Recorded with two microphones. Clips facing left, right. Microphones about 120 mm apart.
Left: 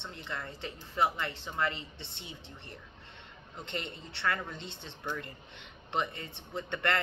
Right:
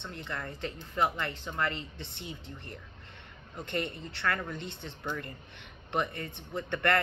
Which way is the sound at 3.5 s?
20° left (ahead or behind).